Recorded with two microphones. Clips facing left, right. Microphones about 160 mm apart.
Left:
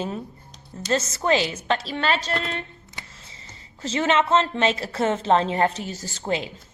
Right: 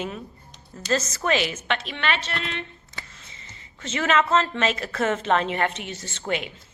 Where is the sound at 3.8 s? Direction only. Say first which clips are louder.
Left 1 dB; 30° left (ahead or behind).